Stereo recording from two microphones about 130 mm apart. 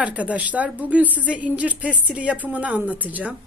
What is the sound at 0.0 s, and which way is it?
Speech, 10° right (ahead or behind).